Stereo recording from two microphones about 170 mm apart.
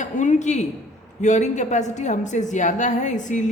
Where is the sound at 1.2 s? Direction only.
45° left (ahead or behind).